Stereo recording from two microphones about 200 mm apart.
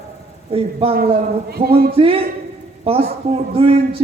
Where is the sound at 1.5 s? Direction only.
50° right (ahead or behind).